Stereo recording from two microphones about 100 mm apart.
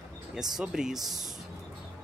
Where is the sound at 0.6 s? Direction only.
5° right (ahead or behind).